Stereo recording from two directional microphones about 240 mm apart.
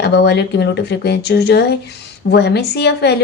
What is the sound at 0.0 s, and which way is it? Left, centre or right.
A woman's voice, left.